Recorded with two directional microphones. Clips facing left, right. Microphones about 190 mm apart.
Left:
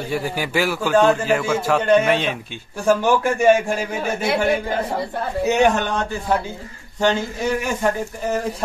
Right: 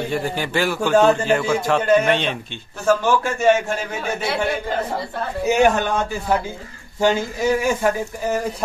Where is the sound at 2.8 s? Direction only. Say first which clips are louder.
Left 1 dB; 15° left (ahead or behind).